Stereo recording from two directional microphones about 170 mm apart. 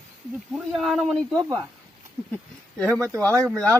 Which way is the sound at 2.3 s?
5° left (ahead or behind).